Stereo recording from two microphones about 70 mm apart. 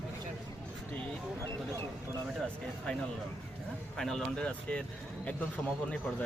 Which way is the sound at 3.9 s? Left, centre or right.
Centre.